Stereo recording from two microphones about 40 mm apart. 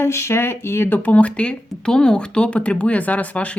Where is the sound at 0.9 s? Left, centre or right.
Left.